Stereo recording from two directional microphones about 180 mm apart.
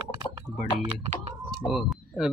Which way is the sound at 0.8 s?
35° right (ahead or behind).